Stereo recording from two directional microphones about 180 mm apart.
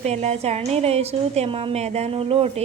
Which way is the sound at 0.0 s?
35° right (ahead or behind).